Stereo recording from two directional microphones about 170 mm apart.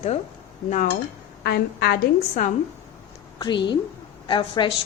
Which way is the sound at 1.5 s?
70° left (ahead or behind).